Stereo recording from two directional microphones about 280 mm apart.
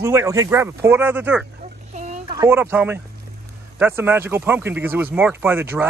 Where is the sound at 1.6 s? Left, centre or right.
Right.